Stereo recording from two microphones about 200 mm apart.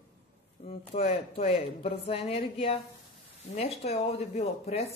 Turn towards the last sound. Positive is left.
turn(degrees=30)  # may be behind; listen again after turning